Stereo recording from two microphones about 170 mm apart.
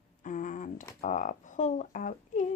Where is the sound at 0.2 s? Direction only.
50° left (ahead or behind).